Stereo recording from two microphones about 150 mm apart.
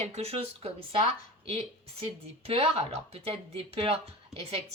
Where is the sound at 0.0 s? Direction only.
45° right (ahead or behind).